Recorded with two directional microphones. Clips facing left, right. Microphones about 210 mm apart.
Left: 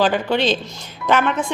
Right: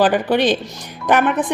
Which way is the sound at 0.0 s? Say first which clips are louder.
Right 3 dB; 15° right (ahead or behind).